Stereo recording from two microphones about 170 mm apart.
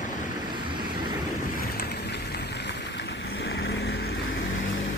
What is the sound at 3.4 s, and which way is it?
Vehicle, 90° left.